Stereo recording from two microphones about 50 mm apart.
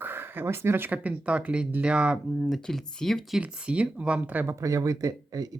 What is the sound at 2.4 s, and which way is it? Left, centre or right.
Speech, centre.